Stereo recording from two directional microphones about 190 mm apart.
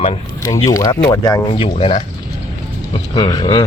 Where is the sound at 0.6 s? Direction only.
15° left (ahead or behind).